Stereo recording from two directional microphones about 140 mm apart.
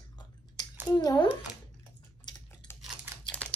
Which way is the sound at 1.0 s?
30° left (ahead or behind).